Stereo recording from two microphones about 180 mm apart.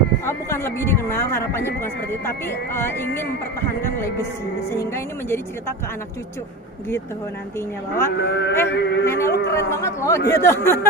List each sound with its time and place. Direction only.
0.3 s speech: 15° left (ahead or behind)
8.1 s a man's voice: 70° left (ahead or behind)
9.0 s speech: 15° left (ahead or behind)